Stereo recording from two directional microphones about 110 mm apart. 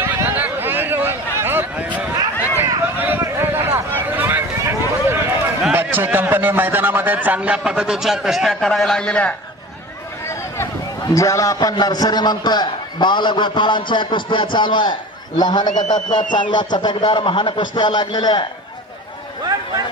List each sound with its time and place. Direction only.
0.0 s a sound: 15° right (ahead or behind)
5.7 s a man's voice: 20° right (ahead or behind); by 9.3 s 10° left (ahead or behind)
11.1 s a man's voice: 30° left (ahead or behind)